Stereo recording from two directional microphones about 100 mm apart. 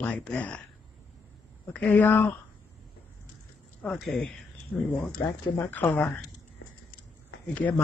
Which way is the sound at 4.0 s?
5° left (ahead or behind).